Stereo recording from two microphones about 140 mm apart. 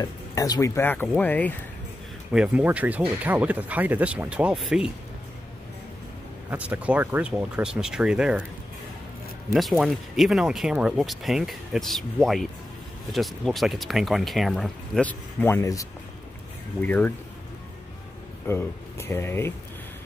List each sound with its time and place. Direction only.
0.0 s speech: 25° left (ahead or behind)
2.3 s speech: 10° right (ahead or behind)
6.5 s speech: 10° right (ahead or behind)
9.5 s speech: centre (ahead or behind); by 15.9 s 25° left (ahead or behind)
16.8 s speech: 10° left (ahead or behind)
18.5 s speech: 15° left (ahead or behind)